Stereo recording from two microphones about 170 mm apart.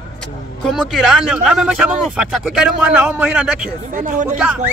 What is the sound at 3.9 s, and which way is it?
Speech, 50° right (ahead or behind).